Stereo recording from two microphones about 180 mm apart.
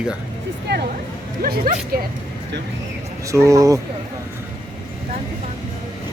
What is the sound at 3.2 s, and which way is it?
Speech, 15° right (ahead or behind).